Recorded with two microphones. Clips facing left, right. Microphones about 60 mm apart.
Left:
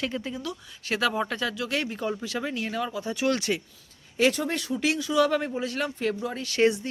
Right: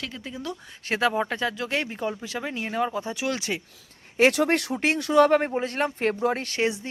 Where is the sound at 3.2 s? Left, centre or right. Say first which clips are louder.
Left 6 dB; centre.